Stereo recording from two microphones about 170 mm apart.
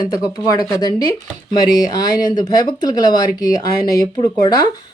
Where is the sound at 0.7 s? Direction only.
20° left (ahead or behind).